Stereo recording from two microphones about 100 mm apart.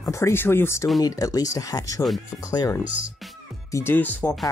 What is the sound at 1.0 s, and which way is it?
Speech, 35° left (ahead or behind).